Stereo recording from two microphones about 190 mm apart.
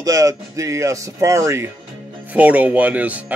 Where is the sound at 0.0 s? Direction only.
15° right (ahead or behind).